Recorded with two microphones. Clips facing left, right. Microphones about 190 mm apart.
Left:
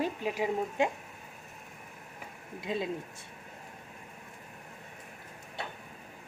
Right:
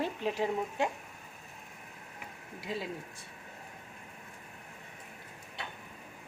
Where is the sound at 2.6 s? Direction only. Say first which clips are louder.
Left 4 dB; 20° left (ahead or behind).